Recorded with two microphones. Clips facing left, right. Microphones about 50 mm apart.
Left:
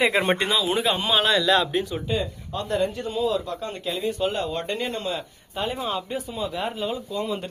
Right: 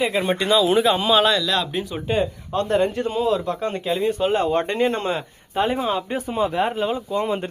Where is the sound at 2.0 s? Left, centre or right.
Right.